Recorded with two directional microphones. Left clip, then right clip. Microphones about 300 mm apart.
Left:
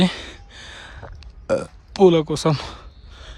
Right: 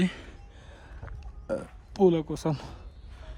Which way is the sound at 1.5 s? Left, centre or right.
Left.